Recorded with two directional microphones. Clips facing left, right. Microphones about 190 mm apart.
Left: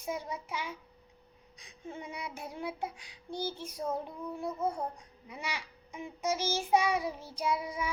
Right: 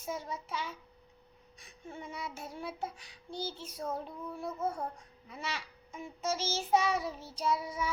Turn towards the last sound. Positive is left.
turn(degrees=15)  # may be behind; listen again after turning